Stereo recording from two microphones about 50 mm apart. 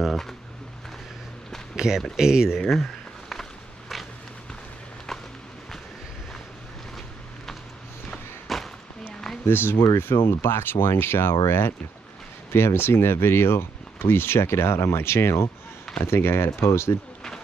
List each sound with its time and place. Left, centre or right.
1.8 s speech: centre
2.7 s a sound: centre
8.1 s walk: centre
9.5 s speech: left